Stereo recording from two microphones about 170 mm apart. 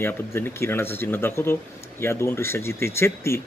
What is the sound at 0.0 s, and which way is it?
Speech, 15° left (ahead or behind).